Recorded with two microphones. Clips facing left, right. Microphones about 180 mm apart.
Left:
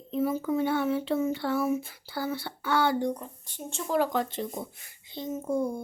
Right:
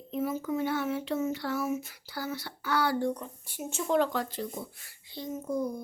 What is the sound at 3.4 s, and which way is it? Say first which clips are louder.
Speech: right 2 dB; 10° right (ahead or behind).